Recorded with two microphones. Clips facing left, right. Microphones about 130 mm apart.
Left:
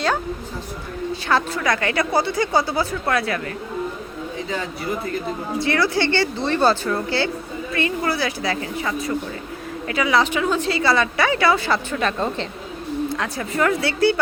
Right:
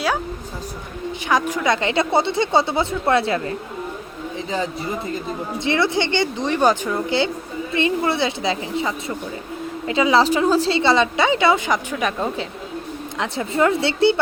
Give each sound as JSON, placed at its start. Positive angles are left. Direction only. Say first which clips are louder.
{"t": 1.3, "sound": "a woman's voice", "louder": "right 2 dB", "side_deg": -15}
{"t": 5.5, "sound": "a woman's voice", "louder": "even", "side_deg": -20}
{"t": 13.1, "sound": "a woman's voice", "louder": "right 2 dB", "side_deg": -25}